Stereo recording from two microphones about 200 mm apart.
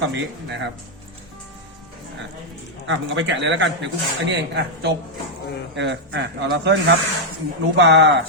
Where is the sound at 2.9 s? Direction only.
65° right (ahead or behind).